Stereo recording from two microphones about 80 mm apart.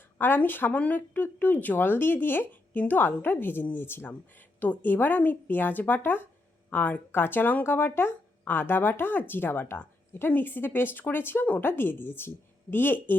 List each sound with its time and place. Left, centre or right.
0.2 s speech: left